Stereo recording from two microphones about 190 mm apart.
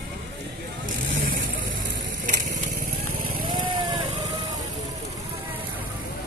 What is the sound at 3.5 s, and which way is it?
Vehicle, 25° right (ahead or behind).